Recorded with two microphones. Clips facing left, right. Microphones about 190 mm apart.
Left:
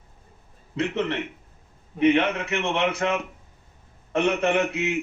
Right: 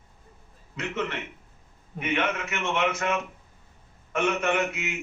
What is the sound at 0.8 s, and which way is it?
A man's voice, 30° left (ahead or behind).